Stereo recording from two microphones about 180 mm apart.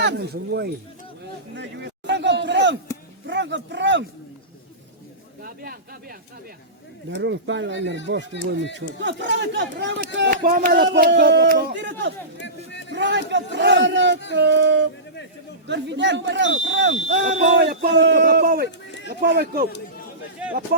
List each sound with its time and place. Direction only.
0.0 s speech: 65° right (ahead or behind)
1.5 s a sound: 75° right (ahead or behind)
3.2 s speech: 80° right
5.4 s speech: 55° right (ahead or behind)
7.1 s a man's voice: 90° right
10.3 s speech: 55° right (ahead or behind)
10.8 s speech: 70° right (ahead or behind)
11.7 s speech: 80° right
12.4 s a sound: 90° left
12.9 s speech: 80° right
17.5 s a man's voice: 65° right (ahead or behind)
20.4 s speech: 5° right (ahead or behind)